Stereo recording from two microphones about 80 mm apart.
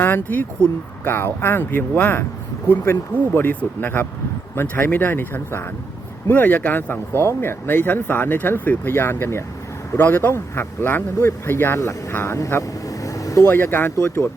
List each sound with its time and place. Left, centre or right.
0.0 s speech: left
12.1 s vehicle: left
13.5 s speech: left